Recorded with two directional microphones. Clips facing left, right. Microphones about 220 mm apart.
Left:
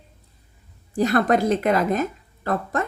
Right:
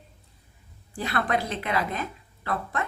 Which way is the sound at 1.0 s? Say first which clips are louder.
Left 9 dB; 45° left (ahead or behind).